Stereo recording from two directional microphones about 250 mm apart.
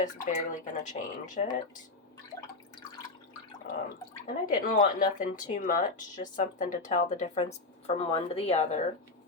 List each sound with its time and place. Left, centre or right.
0.0 s speech: left
4.4 s speech: left